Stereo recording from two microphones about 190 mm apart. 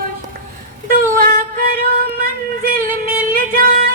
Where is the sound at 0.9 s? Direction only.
45° right (ahead or behind).